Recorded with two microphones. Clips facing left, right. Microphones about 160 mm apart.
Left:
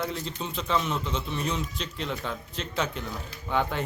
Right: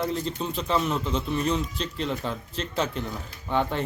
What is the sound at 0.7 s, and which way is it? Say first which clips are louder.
Speech: right 2 dB; 35° right (ahead or behind).